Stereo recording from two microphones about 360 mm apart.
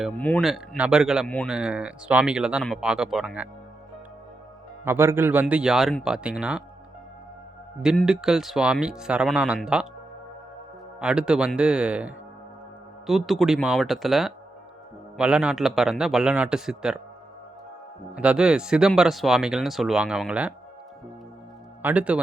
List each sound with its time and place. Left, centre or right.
0.0 s speech: centre
4.9 s speech: centre
7.8 s speech: centre
11.0 s speech: centre
18.1 s speech: centre
21.8 s speech: centre